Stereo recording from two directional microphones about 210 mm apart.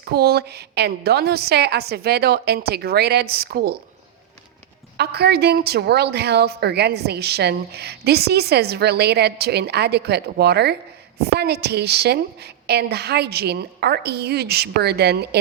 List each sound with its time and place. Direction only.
0.0 s a woman's voice: 50° right (ahead or behind)
4.9 s a woman's voice: 50° right (ahead or behind)